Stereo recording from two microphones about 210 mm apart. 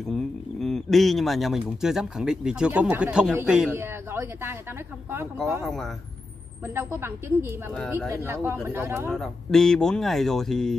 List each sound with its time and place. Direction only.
0.1 s speech: centre (ahead or behind)
6.7 s speech: 10° right (ahead or behind)
7.4 s speech: 5° left (ahead or behind)
8.1 s speech: 10° right (ahead or behind)
9.1 s speech: centre (ahead or behind)